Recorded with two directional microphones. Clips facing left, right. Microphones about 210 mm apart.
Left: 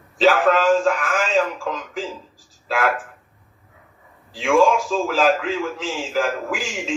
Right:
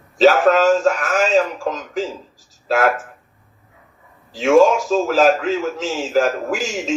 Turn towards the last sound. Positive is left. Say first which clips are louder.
# right 4 dB
turn(degrees=-40)  # may be behind; listen again after turning